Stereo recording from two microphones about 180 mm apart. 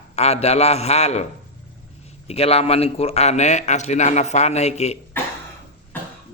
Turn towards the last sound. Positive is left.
turn(degrees=35)  # may be behind; listen again after turning